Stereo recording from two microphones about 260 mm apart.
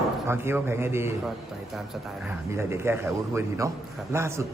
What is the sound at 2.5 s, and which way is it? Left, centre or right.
A man's voice, centre.